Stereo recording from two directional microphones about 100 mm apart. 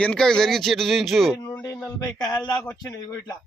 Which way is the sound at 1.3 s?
40° left (ahead or behind).